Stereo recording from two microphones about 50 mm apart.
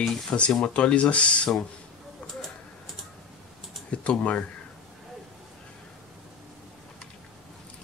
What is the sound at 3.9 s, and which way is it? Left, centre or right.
Speech, left.